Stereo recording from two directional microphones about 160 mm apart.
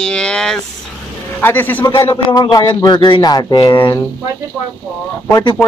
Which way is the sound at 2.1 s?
25° left (ahead or behind).